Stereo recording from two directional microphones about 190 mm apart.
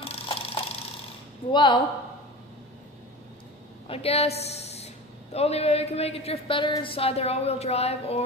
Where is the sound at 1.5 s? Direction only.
25° left (ahead or behind).